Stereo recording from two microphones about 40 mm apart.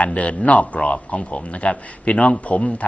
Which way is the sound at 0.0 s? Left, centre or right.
Left.